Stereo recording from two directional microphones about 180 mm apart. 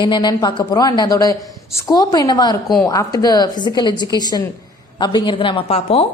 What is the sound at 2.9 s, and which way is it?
A woman's voice, 20° left (ahead or behind).